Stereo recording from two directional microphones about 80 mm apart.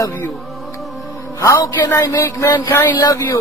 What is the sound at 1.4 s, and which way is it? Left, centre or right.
Speech, left.